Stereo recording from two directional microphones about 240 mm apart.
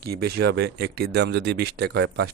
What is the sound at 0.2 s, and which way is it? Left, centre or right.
Speech, right.